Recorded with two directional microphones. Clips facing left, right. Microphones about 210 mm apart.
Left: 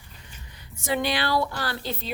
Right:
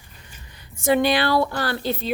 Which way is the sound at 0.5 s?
50° right (ahead or behind).